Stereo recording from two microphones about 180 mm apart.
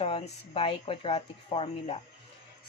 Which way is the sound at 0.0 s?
35° left (ahead or behind).